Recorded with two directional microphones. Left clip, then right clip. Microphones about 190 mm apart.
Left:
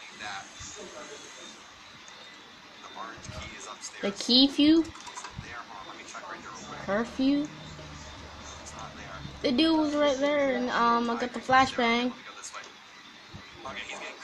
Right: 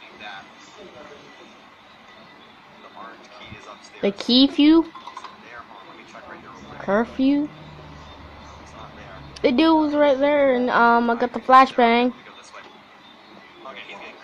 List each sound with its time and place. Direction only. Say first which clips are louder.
4.0 s speech: right 5 dB; 30° right (ahead or behind)
6.9 s speech: right 8 dB; 30° right (ahead or behind)
9.4 s speech: right 8 dB; 30° right (ahead or behind)